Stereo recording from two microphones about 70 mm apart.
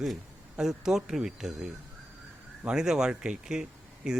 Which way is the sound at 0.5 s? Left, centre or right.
Centre.